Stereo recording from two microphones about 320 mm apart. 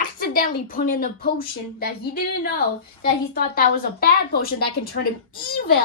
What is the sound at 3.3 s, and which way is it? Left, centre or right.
Speech, left.